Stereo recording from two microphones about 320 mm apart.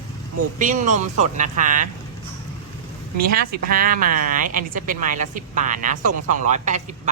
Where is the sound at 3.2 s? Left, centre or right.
Right.